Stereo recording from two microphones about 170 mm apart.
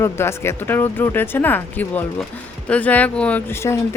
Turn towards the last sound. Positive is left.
turn(degrees=10)  # may be behind; listen again after turning